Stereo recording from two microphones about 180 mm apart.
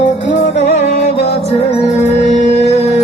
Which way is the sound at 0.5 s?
40° left (ahead or behind).